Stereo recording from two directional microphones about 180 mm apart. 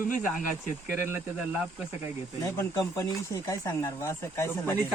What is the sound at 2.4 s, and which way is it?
Speech, 20° left (ahead or behind).